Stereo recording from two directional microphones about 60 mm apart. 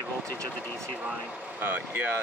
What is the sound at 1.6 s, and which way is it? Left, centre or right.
Speech, right.